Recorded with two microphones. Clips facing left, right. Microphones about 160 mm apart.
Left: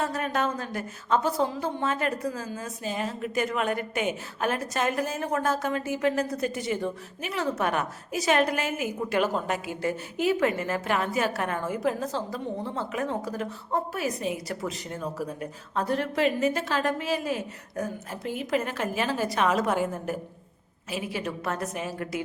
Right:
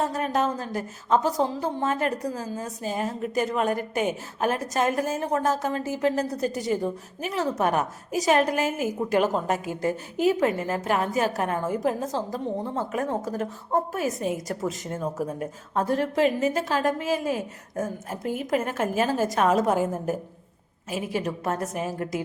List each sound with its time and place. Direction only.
0.0 s a woman's voice: 40° right (ahead or behind)
20.9 s a woman's voice: 45° right (ahead or behind)